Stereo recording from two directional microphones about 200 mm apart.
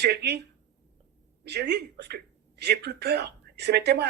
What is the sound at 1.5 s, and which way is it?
A man's voice, 55° right (ahead or behind).